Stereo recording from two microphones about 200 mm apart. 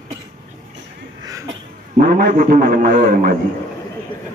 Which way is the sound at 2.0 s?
45° right (ahead or behind).